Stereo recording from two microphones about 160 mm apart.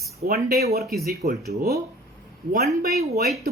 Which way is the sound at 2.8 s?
80° right.